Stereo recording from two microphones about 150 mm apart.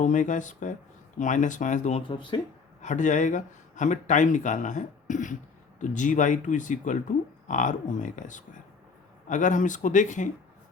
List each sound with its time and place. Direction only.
0.0 s speech: 55° left (ahead or behind)
2.0 s speech: 30° left (ahead or behind)
2.8 s speech: 55° left (ahead or behind)